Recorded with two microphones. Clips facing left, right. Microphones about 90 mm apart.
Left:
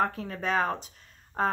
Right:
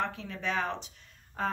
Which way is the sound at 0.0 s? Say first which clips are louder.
Left 5 dB; 40° left (ahead or behind).